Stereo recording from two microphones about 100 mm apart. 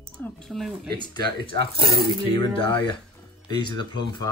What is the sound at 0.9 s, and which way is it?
Speech, 45° left (ahead or behind).